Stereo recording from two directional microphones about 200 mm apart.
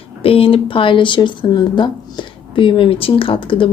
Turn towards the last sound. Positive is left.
turn(degrees=25)  # may be behind; listen again after turning